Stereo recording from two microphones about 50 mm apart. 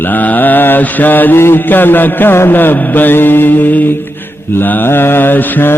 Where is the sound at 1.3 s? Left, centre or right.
Left.